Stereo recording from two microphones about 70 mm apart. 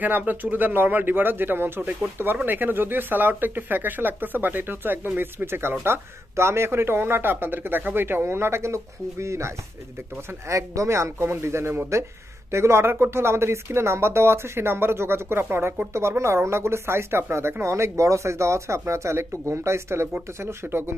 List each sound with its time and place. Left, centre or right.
0.0 s speech: right
10.5 s speech: right